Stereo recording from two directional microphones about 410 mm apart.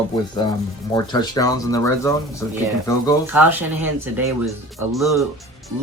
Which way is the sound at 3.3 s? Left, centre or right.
Centre.